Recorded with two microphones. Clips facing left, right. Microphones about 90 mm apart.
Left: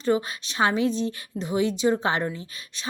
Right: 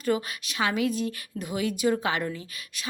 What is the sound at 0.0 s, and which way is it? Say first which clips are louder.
A woman's voice: left 3 dB; 25° left (ahead or behind).